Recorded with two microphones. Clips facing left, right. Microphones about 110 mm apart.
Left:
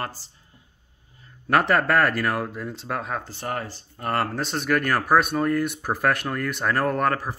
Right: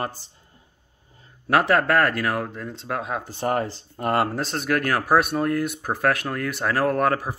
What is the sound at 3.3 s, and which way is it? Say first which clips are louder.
Speech: right 6 dB; 25° right (ahead or behind).